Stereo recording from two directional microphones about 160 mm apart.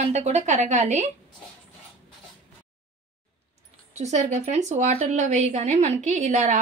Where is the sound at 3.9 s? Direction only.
45° right (ahead or behind).